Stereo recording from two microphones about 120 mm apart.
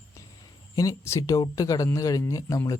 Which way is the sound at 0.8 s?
25° left (ahead or behind).